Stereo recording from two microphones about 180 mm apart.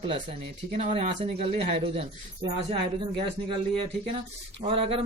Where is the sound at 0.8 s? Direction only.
35° right (ahead or behind).